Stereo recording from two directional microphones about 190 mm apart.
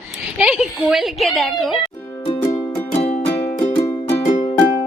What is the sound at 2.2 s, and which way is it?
Music, 25° left (ahead or behind).